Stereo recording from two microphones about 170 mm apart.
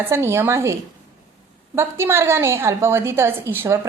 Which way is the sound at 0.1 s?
15° right (ahead or behind).